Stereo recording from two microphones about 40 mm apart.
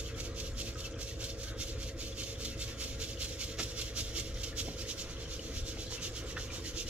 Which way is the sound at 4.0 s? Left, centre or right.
Right.